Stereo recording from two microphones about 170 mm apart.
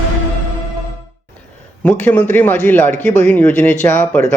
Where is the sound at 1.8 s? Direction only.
10° left (ahead or behind).